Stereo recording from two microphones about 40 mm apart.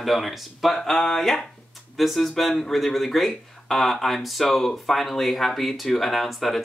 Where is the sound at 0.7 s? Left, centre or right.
Centre.